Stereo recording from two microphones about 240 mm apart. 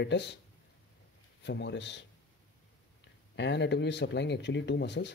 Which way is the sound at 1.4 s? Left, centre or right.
Left.